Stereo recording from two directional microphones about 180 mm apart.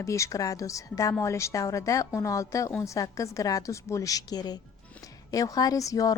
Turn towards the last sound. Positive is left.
turn(degrees=20)  # may be behind; listen again after turning